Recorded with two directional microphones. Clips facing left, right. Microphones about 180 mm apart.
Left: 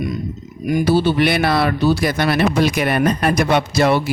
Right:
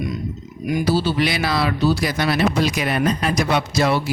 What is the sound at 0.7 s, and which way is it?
Speech, 55° left (ahead or behind).